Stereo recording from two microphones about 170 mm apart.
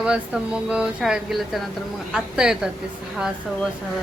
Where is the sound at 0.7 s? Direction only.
5° right (ahead or behind).